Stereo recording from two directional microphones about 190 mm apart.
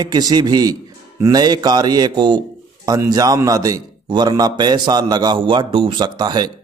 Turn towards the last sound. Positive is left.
turn(degrees=-20)  # may be behind; listen again after turning